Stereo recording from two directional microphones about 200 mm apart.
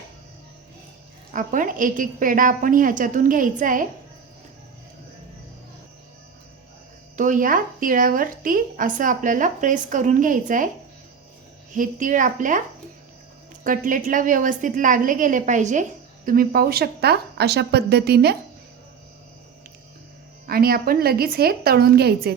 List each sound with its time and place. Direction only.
1.3 s speech: 40° right (ahead or behind)
7.2 s speech: 40° right (ahead or behind)
11.7 s speech: 40° right (ahead or behind)
13.7 s a woman's voice: 40° right (ahead or behind)
20.5 s a woman's voice: 50° right (ahead or behind)